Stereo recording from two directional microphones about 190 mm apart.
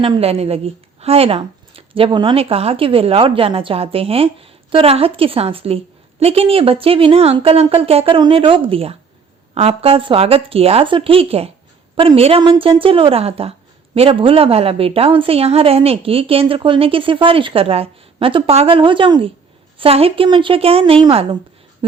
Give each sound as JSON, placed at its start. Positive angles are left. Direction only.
{"t": 0.0, "sound": "speech", "side_deg": -30}